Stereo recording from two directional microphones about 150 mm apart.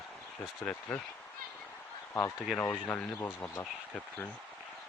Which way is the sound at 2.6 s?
20° left (ahead or behind).